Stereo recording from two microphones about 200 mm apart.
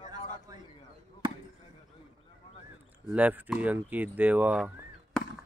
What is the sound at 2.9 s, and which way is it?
Speech, 5° right (ahead or behind).